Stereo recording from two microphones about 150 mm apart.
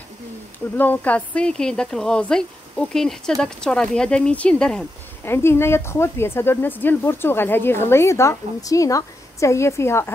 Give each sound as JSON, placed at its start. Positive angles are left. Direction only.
{"t": 0.7, "sound": "speech", "side_deg": 10}
{"t": 5.3, "sound": "speech", "side_deg": 15}